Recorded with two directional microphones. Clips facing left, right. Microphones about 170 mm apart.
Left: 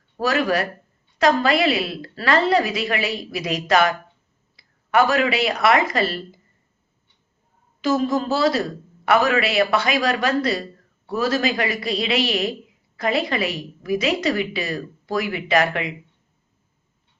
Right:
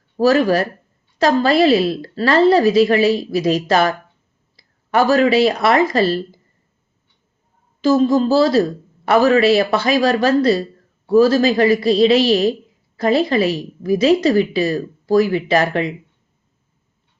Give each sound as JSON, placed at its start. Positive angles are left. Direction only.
{"t": 0.2, "sound": "a woman's voice", "side_deg": -35}
{"t": 7.8, "sound": "a woman's voice", "side_deg": -30}